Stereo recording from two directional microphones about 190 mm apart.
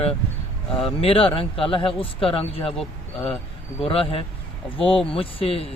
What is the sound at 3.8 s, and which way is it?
Speech, 30° left (ahead or behind).